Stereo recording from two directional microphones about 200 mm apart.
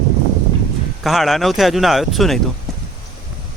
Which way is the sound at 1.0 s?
Centre (ahead or behind).